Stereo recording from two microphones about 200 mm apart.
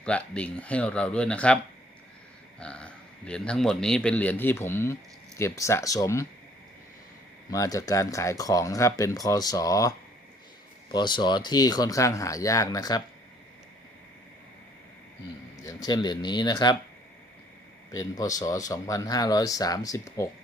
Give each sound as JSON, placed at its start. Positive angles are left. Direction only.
{"t": 0.0, "sound": "a man's voice", "side_deg": 5}
{"t": 2.6, "sound": "a man's voice", "side_deg": 5}
{"t": 7.5, "sound": "speech", "side_deg": 15}
{"t": 10.9, "sound": "speech", "side_deg": 20}
{"t": 15.6, "sound": "speech", "side_deg": 15}
{"t": 17.9, "sound": "speech", "side_deg": 15}